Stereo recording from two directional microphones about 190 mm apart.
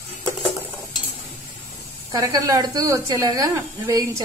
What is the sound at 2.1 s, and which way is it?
Speech, 20° right (ahead or behind).